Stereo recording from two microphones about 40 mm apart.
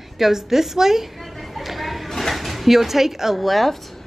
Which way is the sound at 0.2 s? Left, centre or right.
Centre.